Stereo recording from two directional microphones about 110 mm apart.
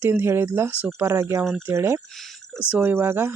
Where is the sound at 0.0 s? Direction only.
20° right (ahead or behind).